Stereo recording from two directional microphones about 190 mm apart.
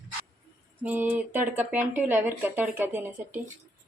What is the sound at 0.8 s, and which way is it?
Speech, 10° right (ahead or behind).